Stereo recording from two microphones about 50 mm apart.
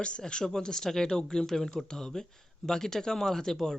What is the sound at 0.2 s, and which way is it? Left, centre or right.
Speech, centre.